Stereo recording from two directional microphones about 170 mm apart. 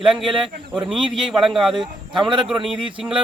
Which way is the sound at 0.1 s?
Centre (ahead or behind).